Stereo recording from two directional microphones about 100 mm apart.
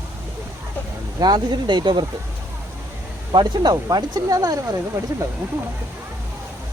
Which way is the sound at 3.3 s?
40° right (ahead or behind).